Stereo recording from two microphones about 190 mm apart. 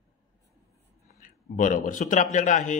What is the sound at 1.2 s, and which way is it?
A man's voice, 45° left (ahead or behind).